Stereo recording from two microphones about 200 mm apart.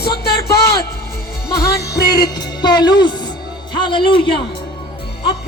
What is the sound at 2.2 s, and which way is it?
Music, 20° left (ahead or behind).